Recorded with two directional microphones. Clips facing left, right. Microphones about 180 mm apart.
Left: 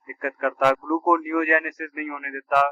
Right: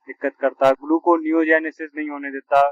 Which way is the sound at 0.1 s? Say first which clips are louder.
Right 6 dB; 30° right (ahead or behind).